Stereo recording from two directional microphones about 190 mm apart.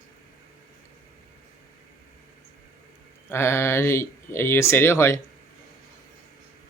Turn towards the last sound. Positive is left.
turn(degrees=15)  # may be behind; listen again after turning